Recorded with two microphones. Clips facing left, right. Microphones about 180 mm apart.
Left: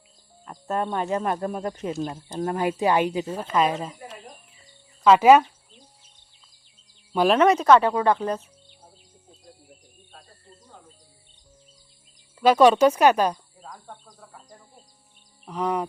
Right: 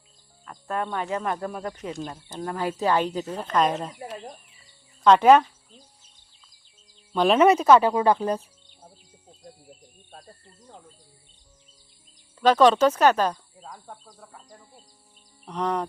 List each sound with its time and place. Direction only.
0.4 s speech: 20° left (ahead or behind); by 5.4 s 5° left (ahead or behind)
7.1 s speech: 5° left (ahead or behind)
7.3 s speech: 5° right (ahead or behind)
12.4 s speech: 10° left (ahead or behind)
13.7 s speech: centre (ahead or behind)
15.4 s speech: 5° left (ahead or behind)